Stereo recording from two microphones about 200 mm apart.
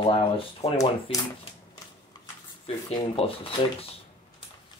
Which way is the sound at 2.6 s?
30° left (ahead or behind).